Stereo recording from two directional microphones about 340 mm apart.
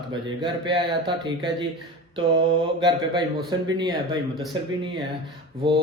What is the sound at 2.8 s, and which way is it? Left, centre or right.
Speech, centre.